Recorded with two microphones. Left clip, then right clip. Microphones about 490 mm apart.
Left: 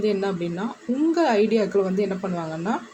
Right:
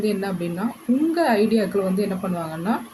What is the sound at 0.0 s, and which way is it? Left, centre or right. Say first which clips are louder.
Speech: left 1 dB; right.